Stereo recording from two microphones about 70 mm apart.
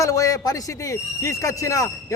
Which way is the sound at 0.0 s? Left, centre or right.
Left.